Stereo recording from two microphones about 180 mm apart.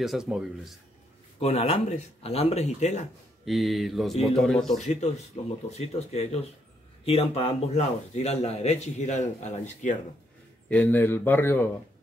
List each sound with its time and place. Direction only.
0.0 s speech: 5° right (ahead or behind)
1.4 s speech: 35° left (ahead or behind)
3.4 s speech: centre (ahead or behind)
4.7 s speech: 40° left (ahead or behind)
10.7 s speech: 10° left (ahead or behind)